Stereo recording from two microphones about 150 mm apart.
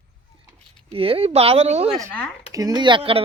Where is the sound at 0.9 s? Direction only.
40° right (ahead or behind).